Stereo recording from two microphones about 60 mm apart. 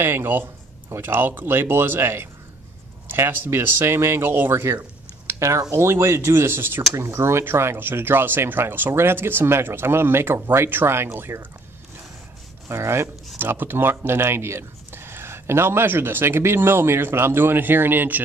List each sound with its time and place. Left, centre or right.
0.0 s speech: right
6.9 s speech: right
12.6 s speech: right
13.4 s speech: right